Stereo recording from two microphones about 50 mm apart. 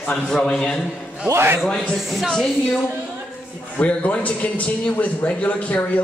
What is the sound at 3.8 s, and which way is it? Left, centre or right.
A man's voice, left.